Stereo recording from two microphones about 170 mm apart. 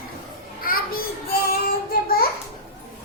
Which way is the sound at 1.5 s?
60° left (ahead or behind).